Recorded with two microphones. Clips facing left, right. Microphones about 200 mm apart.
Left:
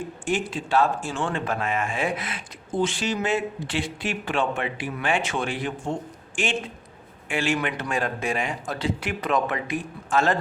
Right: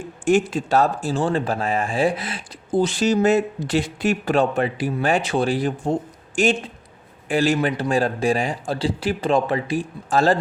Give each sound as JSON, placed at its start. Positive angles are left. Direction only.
{"t": 0.3, "sound": "speech", "side_deg": -45}